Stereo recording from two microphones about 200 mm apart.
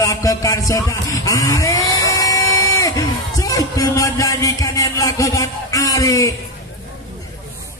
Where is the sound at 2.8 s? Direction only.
15° left (ahead or behind).